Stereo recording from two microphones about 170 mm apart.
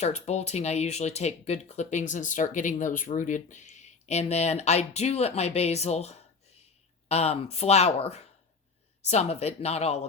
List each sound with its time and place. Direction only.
0.0 s speech: 40° left (ahead or behind)